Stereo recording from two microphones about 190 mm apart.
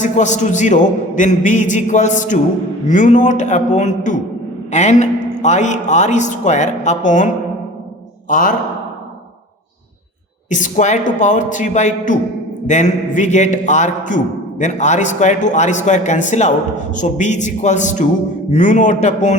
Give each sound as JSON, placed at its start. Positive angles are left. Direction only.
{"t": 0.0, "sound": "speech", "side_deg": 40}
{"t": 8.3, "sound": "speech", "side_deg": 45}
{"t": 10.5, "sound": "speech", "side_deg": 40}